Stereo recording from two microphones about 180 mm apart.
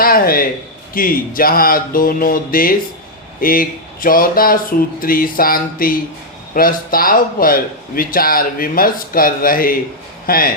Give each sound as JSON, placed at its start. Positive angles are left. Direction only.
{"t": 0.0, "sound": "a man's voice", "side_deg": 55}